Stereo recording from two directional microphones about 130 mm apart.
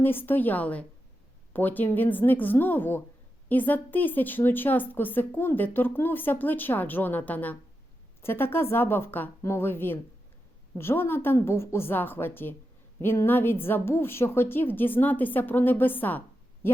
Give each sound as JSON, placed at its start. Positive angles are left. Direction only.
{"t": 0.0, "sound": "a woman's voice", "side_deg": 15}